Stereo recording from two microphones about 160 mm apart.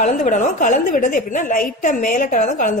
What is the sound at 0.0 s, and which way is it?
A woman's voice, 50° left (ahead or behind).